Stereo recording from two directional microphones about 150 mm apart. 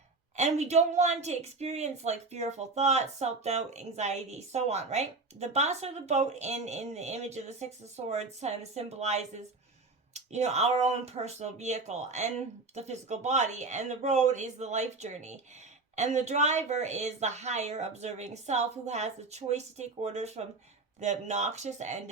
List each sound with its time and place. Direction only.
0.3 s a woman's voice: 50° right (ahead or behind)